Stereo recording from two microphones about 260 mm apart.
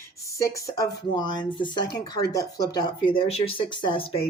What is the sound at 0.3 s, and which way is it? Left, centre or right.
A woman's voice, centre.